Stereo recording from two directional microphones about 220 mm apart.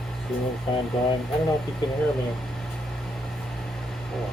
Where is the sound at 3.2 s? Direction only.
Centre (ahead or behind).